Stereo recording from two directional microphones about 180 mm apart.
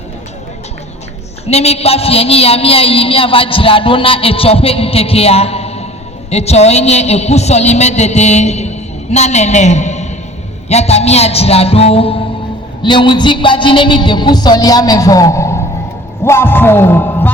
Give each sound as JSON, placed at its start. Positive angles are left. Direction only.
{"t": 1.5, "sound": "a woman's voice", "side_deg": 35}